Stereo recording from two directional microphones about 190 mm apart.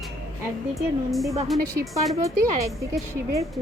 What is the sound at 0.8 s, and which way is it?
Speech, centre (ahead or behind).